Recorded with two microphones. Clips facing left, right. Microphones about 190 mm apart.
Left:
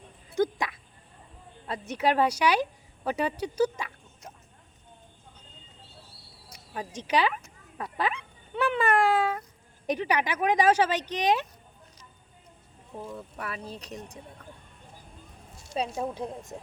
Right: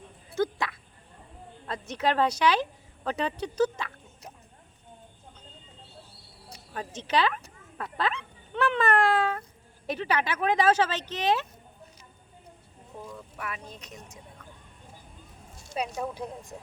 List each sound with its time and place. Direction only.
0.3 s a sound: 15° left (ahead or behind)
1.9 s speech: 10° left (ahead or behind)
6.7 s speech: 10° left (ahead or behind)
7.8 s a sound: 10° left (ahead or behind)
9.8 s speech: 15° left (ahead or behind)
13.1 s speech: 35° left (ahead or behind)
16.0 s speech: 25° left (ahead or behind)